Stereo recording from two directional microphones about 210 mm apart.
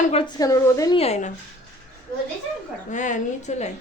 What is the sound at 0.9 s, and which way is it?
Speech, 30° left (ahead or behind).